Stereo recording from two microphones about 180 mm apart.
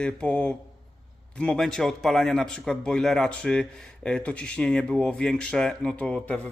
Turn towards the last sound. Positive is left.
turn(degrees=5)  # may be behind; listen again after turning